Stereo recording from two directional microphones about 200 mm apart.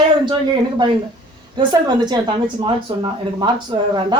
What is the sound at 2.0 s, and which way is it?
Speech, 20° right (ahead or behind).